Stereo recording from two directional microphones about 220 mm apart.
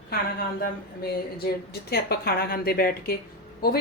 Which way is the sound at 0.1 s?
45° left (ahead or behind).